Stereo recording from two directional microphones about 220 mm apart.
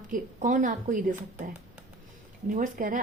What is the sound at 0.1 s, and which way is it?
Speech, 35° right (ahead or behind).